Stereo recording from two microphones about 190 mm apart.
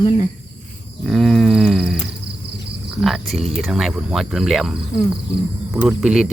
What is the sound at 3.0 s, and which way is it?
Speech, centre (ahead or behind).